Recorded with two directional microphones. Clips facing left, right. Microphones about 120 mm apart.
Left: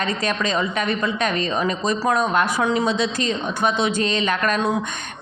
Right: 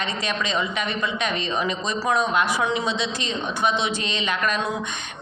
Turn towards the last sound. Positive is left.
turn(degrees=45)  # may be behind; listen again after turning